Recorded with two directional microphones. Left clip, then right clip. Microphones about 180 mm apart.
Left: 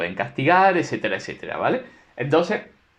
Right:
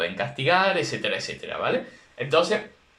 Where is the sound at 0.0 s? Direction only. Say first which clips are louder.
Left 2 dB; 30° left (ahead or behind).